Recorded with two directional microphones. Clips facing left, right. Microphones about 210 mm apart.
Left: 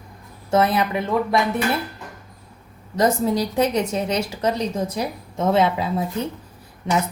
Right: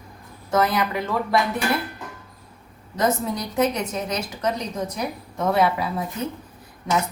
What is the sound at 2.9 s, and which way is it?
A woman's voice, 30° left (ahead or behind).